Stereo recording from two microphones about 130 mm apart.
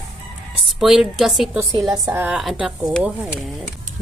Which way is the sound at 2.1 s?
15° right (ahead or behind).